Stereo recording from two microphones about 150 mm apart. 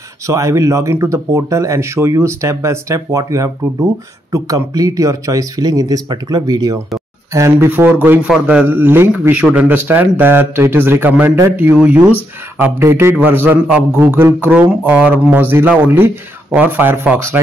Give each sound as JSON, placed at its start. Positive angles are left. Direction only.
{"t": 0.3, "sound": "a man's voice", "side_deg": -20}